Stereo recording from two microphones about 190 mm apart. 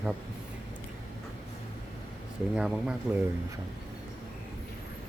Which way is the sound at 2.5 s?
5° right (ahead or behind).